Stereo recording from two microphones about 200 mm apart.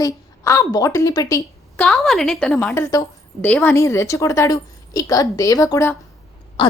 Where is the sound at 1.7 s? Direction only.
5° left (ahead or behind).